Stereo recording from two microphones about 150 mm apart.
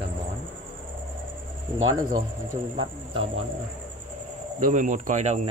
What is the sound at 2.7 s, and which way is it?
Speech, 35° right (ahead or behind).